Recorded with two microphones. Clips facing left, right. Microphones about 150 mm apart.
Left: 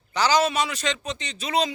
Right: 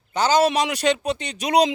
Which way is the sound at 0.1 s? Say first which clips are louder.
Right 3 dB; 50° right (ahead or behind).